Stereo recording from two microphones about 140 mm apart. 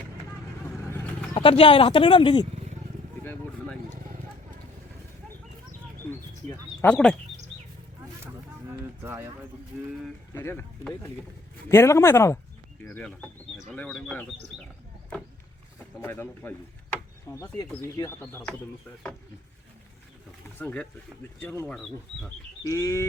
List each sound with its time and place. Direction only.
0.9 s vehicle: 15° left (ahead or behind)
1.4 s speech: 40° left (ahead or behind)
6.1 s a sound: 15° left (ahead or behind)
9.0 s speech: 15° right (ahead or behind)
10.3 s speech: 20° left (ahead or behind)
11.7 s speech: 20° left (ahead or behind)
12.9 s speech: 10° left (ahead or behind)
16.0 s speech: 15° left (ahead or behind)
18.2 s speech: 10° left (ahead or behind)
20.6 s speech: 15° left (ahead or behind)
21.7 s speech: 5° left (ahead or behind)
22.6 s speech: 20° left (ahead or behind)